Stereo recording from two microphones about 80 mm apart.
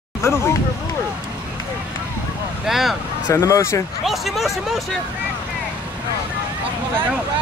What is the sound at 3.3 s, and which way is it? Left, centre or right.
Speech, left.